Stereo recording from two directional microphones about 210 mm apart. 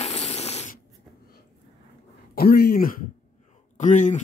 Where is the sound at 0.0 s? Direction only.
30° left (ahead or behind).